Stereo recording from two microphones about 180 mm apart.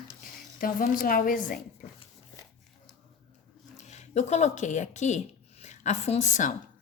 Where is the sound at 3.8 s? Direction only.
40° left (ahead or behind).